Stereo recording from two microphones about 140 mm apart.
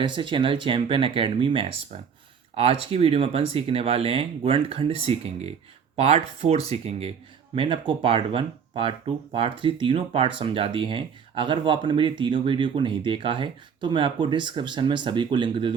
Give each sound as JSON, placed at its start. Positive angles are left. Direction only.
{"t": 0.0, "sound": "speech", "side_deg": -35}